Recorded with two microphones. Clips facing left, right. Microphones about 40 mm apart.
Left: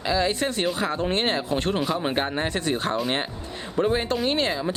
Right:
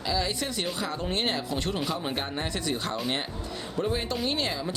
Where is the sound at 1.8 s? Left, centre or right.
Centre.